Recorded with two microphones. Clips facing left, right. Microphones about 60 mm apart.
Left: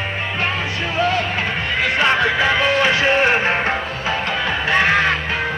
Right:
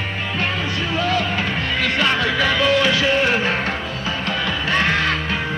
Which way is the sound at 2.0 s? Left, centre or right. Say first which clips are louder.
Left 3 dB; left.